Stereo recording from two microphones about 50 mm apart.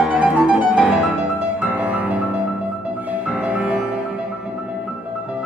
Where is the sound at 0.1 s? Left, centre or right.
Right.